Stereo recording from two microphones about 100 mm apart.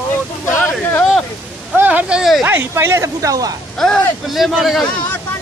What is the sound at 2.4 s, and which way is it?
Speech, 25° right (ahead or behind).